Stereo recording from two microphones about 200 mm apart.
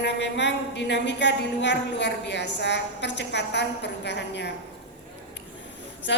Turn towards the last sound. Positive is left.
turn(degrees=65)  # may be behind; listen again after turning